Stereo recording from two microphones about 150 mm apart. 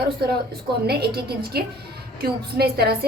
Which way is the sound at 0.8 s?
90° right.